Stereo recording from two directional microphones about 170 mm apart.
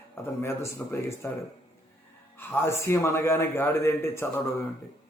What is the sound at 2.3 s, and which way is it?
A man's voice, 15° left (ahead or behind).